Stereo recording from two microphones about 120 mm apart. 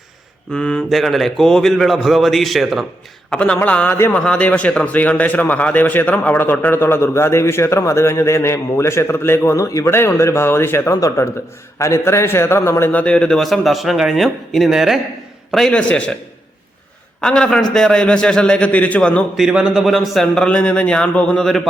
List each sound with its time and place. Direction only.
0.5 s a man's voice: 5° left (ahead or behind)
17.2 s a man's voice: 5° left (ahead or behind)
19.4 s a man's voice: 5° right (ahead or behind)